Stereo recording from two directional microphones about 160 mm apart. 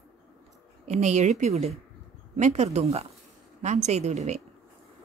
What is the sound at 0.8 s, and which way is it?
Speech, 45° right (ahead or behind).